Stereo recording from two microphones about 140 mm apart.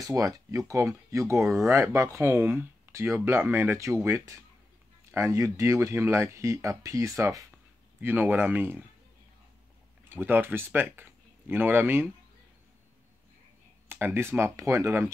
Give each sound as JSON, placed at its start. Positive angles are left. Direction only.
{"t": 0.0, "sound": "speech", "side_deg": -25}
{"t": 10.0, "sound": "speech", "side_deg": -15}
{"t": 13.8, "sound": "speech", "side_deg": -15}